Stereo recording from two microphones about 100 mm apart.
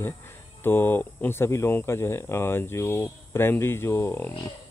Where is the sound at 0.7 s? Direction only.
20° left (ahead or behind).